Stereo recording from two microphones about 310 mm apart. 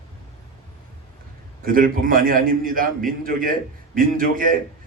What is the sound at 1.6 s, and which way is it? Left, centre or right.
A man's voice, right.